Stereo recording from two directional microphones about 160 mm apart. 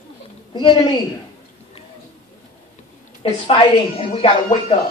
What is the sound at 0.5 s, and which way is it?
Speech, 30° left (ahead or behind).